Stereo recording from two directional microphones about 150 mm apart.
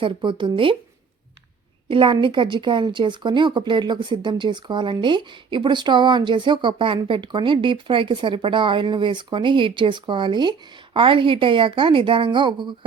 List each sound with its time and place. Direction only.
0.0 s speech: 30° right (ahead or behind)
1.9 s speech: 35° right (ahead or behind)